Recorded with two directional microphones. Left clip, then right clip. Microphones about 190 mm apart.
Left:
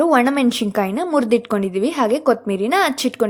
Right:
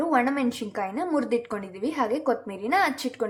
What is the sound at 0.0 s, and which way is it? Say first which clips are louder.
A woman's voice: left 8 dB; 45° left (ahead or behind).